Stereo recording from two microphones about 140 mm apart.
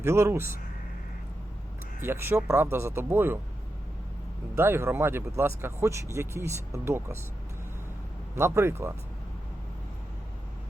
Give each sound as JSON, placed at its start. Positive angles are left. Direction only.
{"t": 0.0, "sound": "speech", "side_deg": -20}
{"t": 2.0, "sound": "a man's voice", "side_deg": -15}
{"t": 4.5, "sound": "speech", "side_deg": -15}
{"t": 8.4, "sound": "a man's voice", "side_deg": -20}